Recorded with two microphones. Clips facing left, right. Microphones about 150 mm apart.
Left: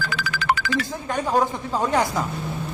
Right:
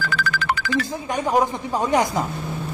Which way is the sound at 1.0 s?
15° right (ahead or behind).